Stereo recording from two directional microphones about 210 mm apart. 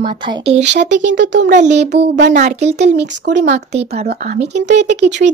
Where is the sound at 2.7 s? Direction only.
55° right (ahead or behind).